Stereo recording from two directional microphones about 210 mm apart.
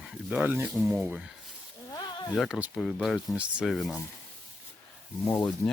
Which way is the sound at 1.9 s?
20° left (ahead or behind).